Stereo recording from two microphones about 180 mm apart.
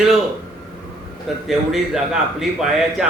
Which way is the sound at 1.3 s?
Centre (ahead or behind).